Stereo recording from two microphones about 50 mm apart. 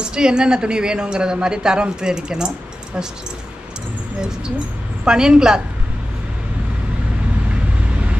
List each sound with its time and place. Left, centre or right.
0.0 s a woman's voice: centre
5.0 s a woman's voice: centre